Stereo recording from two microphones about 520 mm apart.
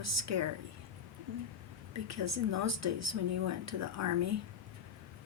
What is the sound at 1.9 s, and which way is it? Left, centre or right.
Speech, right.